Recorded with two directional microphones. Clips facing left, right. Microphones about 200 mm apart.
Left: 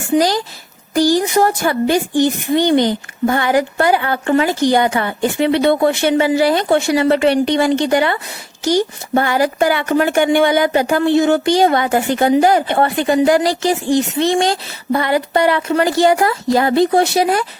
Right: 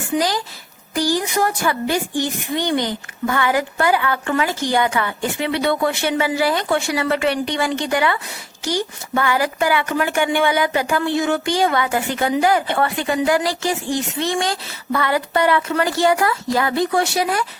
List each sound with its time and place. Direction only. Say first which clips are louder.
0.2 s a woman's voice: left 5 dB; 35° left (ahead or behind)
0.9 s a woman's voice: left 6 dB; 25° left (ahead or behind); by 11.0 s 40° left (ahead or behind)
11.0 s speech: left 7 dB; 25° left (ahead or behind)
11.6 s a woman's voice: left 5 dB; 40° left (ahead or behind)